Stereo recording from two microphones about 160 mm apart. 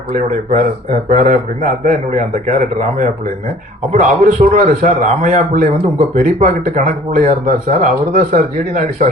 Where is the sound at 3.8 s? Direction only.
45° right (ahead or behind).